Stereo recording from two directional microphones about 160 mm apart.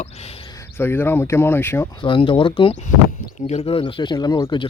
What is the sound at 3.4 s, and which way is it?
Speech, 45° left (ahead or behind).